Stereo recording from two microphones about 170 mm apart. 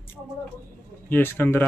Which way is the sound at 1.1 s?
10° left (ahead or behind).